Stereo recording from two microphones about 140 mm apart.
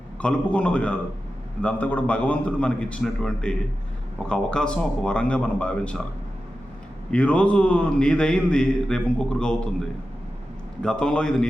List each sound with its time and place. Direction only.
0.2 s a man's voice: 10° left (ahead or behind)
7.1 s a man's voice: 10° left (ahead or behind)
10.8 s a man's voice: 5° left (ahead or behind)